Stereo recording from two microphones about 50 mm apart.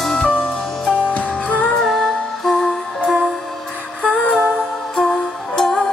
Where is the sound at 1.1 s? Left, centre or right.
Left.